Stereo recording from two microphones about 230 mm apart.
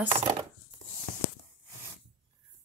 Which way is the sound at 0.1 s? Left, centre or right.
Right.